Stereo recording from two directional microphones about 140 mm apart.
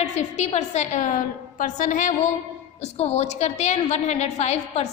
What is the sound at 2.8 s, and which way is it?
A woman's voice, 50° left (ahead or behind).